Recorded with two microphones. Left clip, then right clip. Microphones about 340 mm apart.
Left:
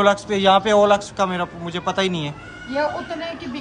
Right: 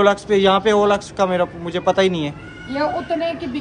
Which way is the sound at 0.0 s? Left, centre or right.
Centre.